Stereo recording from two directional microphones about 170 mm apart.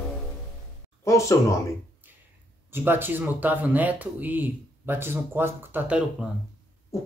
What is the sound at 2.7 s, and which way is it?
Speech, 10° right (ahead or behind).